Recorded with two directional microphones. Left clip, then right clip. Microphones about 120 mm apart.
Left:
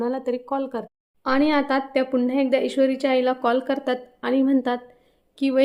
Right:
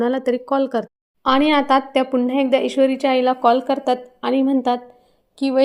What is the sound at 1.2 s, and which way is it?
Speech, 25° right (ahead or behind).